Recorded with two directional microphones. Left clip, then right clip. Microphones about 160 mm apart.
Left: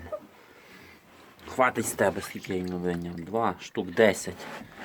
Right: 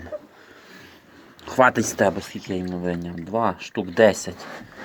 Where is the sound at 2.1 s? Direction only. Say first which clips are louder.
Right 3 dB; centre (ahead or behind).